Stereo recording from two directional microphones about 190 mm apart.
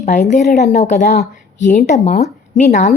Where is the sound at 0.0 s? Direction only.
40° left (ahead or behind).